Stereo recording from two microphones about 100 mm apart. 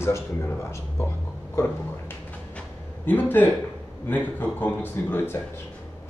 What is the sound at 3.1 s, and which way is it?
Speech, 20° left (ahead or behind).